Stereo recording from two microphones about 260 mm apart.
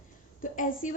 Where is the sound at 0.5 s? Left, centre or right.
Left.